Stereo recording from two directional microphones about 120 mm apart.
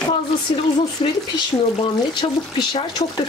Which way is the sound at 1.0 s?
45° left (ahead or behind).